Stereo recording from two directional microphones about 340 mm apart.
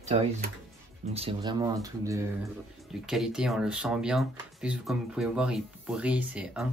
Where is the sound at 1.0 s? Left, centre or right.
Centre.